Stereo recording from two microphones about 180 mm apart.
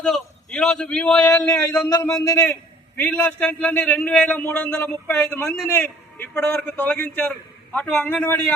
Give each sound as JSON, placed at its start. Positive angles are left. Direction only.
{"t": 0.0, "sound": "a man's voice", "side_deg": 5}
{"t": 1.9, "sound": "a man's voice", "side_deg": 15}